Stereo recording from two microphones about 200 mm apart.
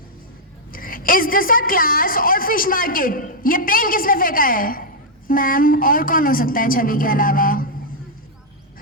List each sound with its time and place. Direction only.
0.7 s a woman's voice: 45° left (ahead or behind)